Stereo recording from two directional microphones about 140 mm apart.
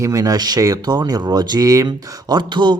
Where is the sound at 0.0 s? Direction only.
25° right (ahead or behind).